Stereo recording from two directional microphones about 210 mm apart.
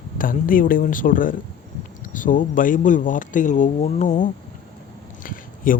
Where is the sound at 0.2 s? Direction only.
40° left (ahead or behind).